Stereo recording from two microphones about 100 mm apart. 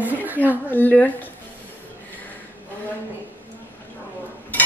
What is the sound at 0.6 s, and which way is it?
Speech, 20° left (ahead or behind).